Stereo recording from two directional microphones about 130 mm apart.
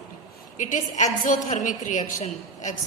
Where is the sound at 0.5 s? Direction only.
75° left (ahead or behind).